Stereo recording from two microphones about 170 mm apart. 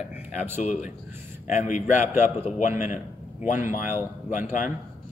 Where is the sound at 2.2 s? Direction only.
45° left (ahead or behind).